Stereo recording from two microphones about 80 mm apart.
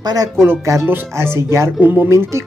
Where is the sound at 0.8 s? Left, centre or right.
Right.